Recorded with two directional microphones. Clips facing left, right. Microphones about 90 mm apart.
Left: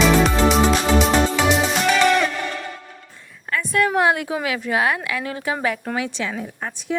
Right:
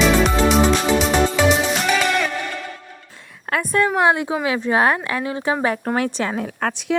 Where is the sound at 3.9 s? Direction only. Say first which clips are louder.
Right 1 dB; 25° right (ahead or behind); by 6.3 s 45° right (ahead or behind).